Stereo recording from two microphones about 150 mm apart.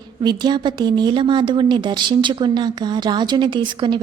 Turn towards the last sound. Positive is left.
turn(degrees=-30)  # may be behind; listen again after turning